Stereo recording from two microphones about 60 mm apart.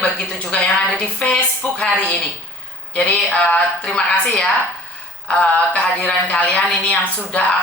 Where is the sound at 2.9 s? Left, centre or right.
Left.